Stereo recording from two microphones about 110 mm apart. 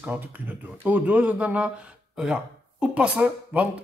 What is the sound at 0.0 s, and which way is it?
Speech, 15° right (ahead or behind).